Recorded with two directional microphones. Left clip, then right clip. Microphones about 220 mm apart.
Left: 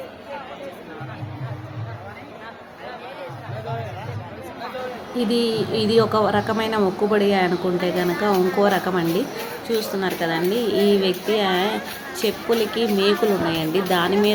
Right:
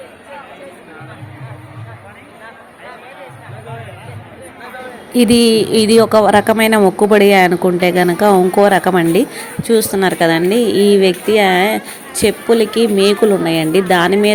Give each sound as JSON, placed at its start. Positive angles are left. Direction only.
{"t": 5.1, "sound": "speech", "side_deg": -40}